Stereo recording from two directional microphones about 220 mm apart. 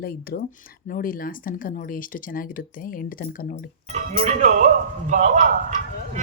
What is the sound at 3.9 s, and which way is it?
Speech, 30° right (ahead or behind).